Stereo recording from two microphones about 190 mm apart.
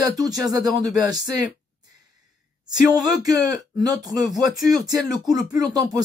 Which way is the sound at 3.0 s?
20° right (ahead or behind).